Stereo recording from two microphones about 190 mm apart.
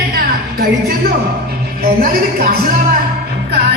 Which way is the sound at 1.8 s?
50° right (ahead or behind).